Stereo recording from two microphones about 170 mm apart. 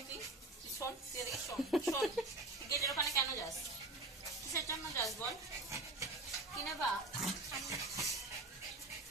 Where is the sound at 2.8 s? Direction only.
20° left (ahead or behind).